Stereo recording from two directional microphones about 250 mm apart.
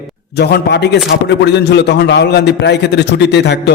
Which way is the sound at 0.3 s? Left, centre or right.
Left.